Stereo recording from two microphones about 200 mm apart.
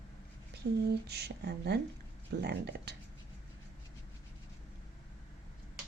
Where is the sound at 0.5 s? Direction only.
55° right (ahead or behind).